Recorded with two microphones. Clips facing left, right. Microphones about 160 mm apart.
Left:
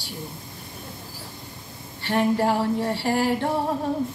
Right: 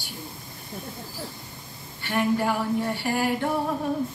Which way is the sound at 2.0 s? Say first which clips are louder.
Left 3 dB; 30° left (ahead or behind).